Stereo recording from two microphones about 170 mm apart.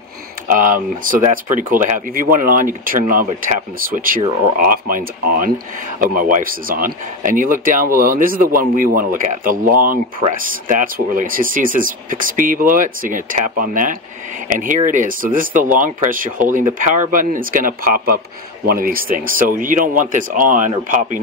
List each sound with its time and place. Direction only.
0.5 s speech: 50° right (ahead or behind)